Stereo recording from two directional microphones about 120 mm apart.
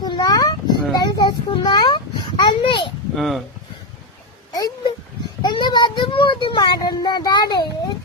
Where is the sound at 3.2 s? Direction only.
Centre (ahead or behind).